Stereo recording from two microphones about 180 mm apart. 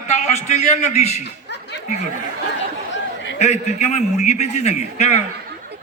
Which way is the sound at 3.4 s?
40° left (ahead or behind).